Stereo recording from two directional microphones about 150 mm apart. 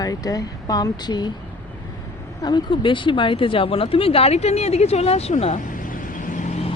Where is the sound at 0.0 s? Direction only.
25° left (ahead or behind).